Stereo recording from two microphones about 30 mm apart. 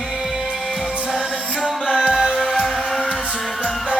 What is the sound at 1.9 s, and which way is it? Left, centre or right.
Music, right.